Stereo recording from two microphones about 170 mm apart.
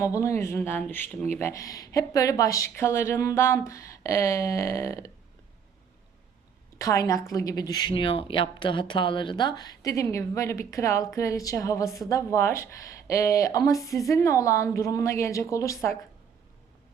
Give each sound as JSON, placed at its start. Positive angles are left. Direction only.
{"t": 0.0, "sound": "speech", "side_deg": 15}
{"t": 6.7, "sound": "a woman's voice", "side_deg": 20}